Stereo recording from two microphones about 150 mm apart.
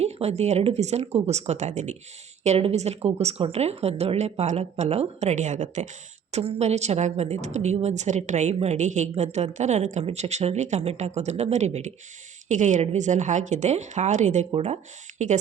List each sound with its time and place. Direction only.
0.0 s speech: 45° right (ahead or behind)